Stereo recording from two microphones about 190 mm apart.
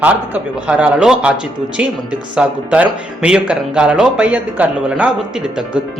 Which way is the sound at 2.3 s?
5° right (ahead or behind).